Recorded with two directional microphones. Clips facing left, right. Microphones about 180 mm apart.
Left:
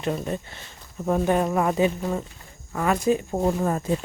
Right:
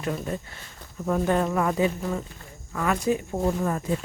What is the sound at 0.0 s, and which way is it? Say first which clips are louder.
Speech: left 2 dB; 25° left (ahead or behind).